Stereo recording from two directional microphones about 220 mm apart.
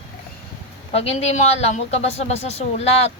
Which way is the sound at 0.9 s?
30° left (ahead or behind).